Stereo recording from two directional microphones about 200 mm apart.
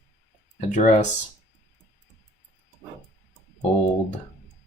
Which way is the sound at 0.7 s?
40° left (ahead or behind).